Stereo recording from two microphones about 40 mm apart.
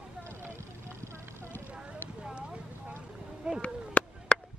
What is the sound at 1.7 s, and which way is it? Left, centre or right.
Clip-clop, right.